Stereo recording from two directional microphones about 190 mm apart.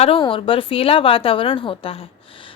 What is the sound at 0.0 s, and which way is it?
A woman's voice, 30° left (ahead or behind).